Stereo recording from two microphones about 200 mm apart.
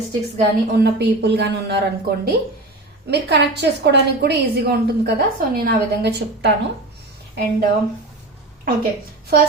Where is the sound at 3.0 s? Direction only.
55° right (ahead or behind).